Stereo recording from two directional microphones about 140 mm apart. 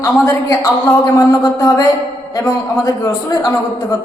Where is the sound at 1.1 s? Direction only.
25° left (ahead or behind).